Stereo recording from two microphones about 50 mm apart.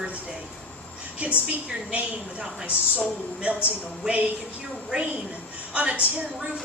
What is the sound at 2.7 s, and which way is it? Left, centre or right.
Speech, right.